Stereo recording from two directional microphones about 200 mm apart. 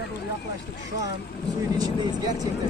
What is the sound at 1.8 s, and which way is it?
Vehicle, 20° right (ahead or behind).